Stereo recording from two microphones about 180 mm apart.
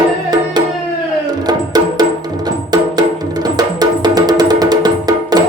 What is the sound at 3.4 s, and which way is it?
Music, 20° right (ahead or behind).